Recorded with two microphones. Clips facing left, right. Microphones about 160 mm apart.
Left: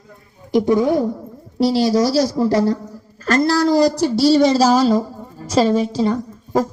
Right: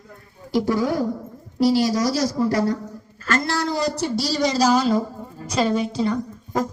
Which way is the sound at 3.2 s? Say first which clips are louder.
Left 8 dB; 35° left (ahead or behind).